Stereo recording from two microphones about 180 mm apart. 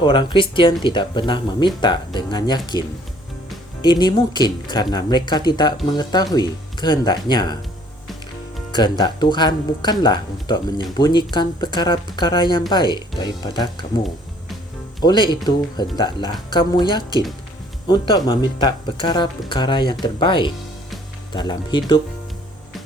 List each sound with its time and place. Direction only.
0.0 s speech: 25° left (ahead or behind)
3.8 s speech: 25° left (ahead or behind)
8.7 s speech: 25° left (ahead or behind)
15.0 s speech: 25° left (ahead or behind)